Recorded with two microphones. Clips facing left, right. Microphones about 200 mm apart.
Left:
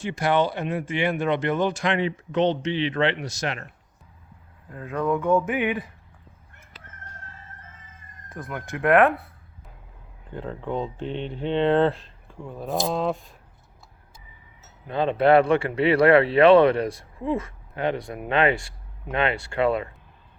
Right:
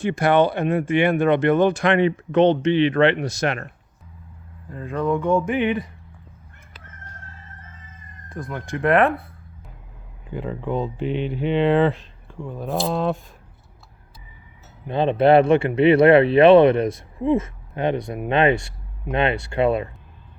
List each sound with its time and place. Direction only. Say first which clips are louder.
0.0 s speech: right 5 dB; 55° right (ahead or behind)
4.7 s speech: right 2 dB; 5° left (ahead or behind)
8.3 s speech: right 3 dB; 5° left (ahead or behind)
10.3 s speech: right 4 dB; 5° right (ahead or behind)
14.8 s speech: right 3 dB; 25° right (ahead or behind)